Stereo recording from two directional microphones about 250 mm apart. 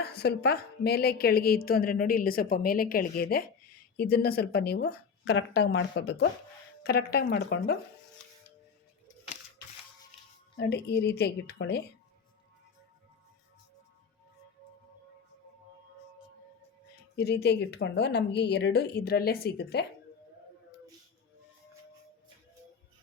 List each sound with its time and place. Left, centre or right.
0.0 s a woman's voice: left
10.6 s a woman's voice: left
17.2 s a woman's voice: left